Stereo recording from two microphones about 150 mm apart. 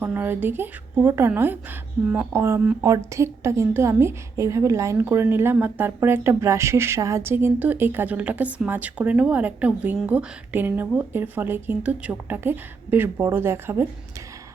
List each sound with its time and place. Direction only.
0.0 s a woman's voice: 15° right (ahead or behind)